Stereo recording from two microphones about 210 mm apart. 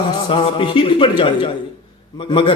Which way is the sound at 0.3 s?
25° left (ahead or behind).